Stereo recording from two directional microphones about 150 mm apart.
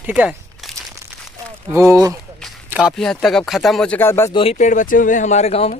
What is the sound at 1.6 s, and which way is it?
Speech, 20° right (ahead or behind).